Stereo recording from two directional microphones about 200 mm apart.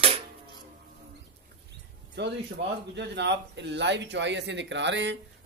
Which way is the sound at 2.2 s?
60° right (ahead or behind).